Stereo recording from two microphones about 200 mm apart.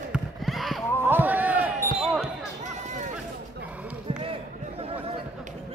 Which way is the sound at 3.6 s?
5° right (ahead or behind).